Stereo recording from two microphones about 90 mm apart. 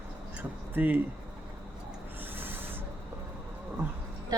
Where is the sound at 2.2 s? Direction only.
20° right (ahead or behind).